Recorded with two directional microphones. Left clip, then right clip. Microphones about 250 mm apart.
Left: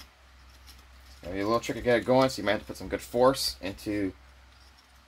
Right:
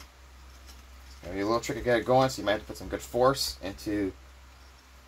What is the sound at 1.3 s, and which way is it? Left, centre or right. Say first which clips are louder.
Speech: left 1 dB; left.